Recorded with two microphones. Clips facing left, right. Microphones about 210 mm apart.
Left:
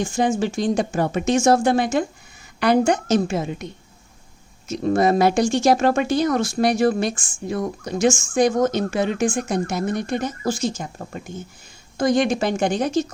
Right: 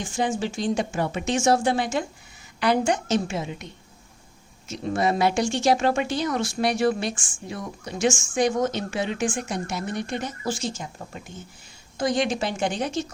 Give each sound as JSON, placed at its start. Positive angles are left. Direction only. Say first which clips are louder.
{"t": 0.0, "sound": "speech", "louder": "left 5 dB", "side_deg": 45}
{"t": 4.7, "sound": "speech", "louder": "left 6 dB", "side_deg": 45}